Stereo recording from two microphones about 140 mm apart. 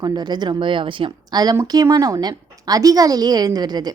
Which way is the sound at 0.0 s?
30° right (ahead or behind).